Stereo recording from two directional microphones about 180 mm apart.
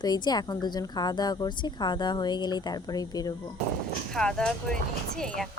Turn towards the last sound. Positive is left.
turn(degrees=5)  # may be behind; listen again after turning